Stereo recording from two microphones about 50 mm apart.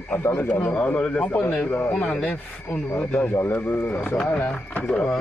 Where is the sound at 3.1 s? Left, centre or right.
Left.